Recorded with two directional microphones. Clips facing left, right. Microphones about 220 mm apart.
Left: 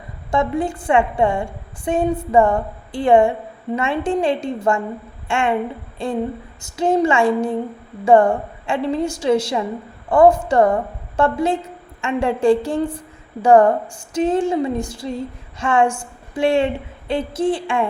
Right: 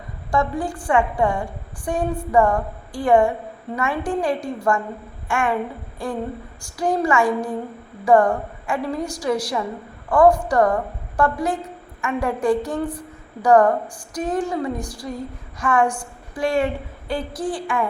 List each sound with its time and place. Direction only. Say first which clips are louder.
0.3 s speech: left 3 dB; 25° left (ahead or behind)